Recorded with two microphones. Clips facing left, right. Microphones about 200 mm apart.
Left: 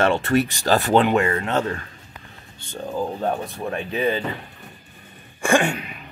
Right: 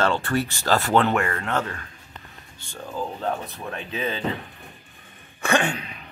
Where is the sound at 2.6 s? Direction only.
20° left (ahead or behind).